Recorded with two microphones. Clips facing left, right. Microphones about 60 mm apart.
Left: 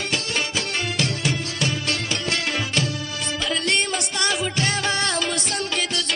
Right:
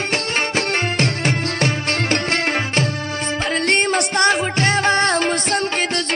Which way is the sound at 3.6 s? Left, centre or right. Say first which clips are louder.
Right 6 dB; right.